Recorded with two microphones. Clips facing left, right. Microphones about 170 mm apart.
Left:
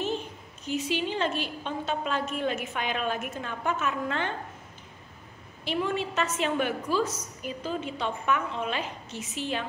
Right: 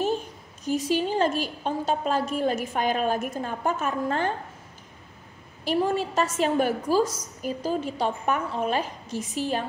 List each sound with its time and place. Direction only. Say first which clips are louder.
0.0 s a woman's voice: right 4 dB; 40° right (ahead or behind)
5.7 s a woman's voice: right 5 dB; 40° right (ahead or behind)